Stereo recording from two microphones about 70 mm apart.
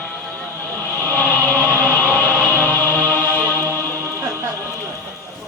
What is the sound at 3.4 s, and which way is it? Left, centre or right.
Chant, right.